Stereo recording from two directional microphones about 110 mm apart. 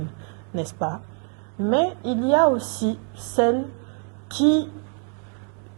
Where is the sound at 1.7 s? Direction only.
10° right (ahead or behind).